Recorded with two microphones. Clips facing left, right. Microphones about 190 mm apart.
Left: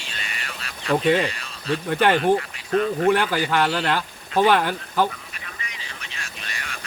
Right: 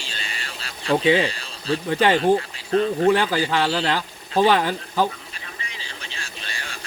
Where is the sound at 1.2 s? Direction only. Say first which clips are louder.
Right 1 dB; 30° right (ahead or behind).